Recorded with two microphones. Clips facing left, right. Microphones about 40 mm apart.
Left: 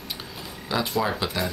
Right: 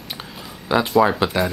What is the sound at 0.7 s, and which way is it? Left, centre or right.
Speech, centre.